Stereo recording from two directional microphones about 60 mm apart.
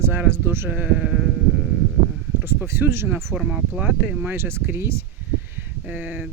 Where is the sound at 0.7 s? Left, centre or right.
Right.